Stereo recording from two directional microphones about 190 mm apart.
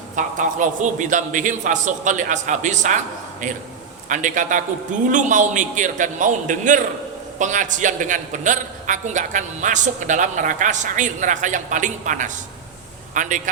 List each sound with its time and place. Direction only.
0.2 s a man's voice: 40° right (ahead or behind)